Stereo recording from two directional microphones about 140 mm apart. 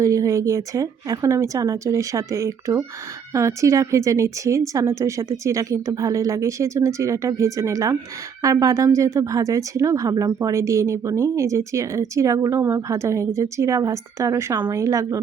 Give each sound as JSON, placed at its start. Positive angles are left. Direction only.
{"t": 0.0, "sound": "speech", "side_deg": -20}